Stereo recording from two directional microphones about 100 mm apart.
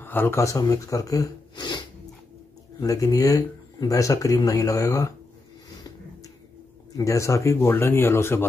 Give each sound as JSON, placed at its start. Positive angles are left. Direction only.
{"t": 0.0, "sound": "speech", "side_deg": 20}
{"t": 2.8, "sound": "speech", "side_deg": 35}
{"t": 7.0, "sound": "speech", "side_deg": 30}